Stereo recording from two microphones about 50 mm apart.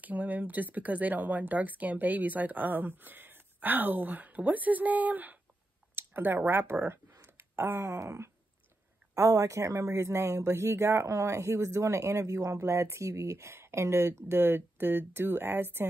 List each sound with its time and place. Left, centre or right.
0.0 s speech: right
5.9 s speech: right
6.9 s a sound: right
7.8 s wail: right
9.1 s speech: right